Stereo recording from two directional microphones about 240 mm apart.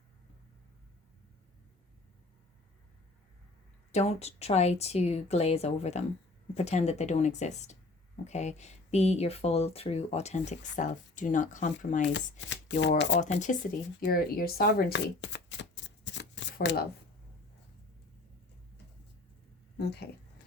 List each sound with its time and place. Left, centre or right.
3.9 s speech: left
12.0 s speech: left
13.4 s speech: left
19.7 s speech: left